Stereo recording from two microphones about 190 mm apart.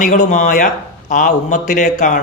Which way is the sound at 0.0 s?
40° left (ahead or behind).